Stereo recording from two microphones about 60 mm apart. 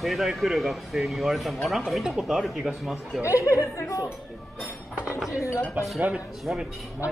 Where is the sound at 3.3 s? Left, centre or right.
Left.